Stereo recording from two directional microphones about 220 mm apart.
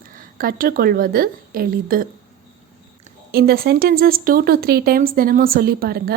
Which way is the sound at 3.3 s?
45° right (ahead or behind).